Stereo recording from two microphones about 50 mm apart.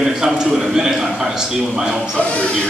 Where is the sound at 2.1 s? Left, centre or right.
Left.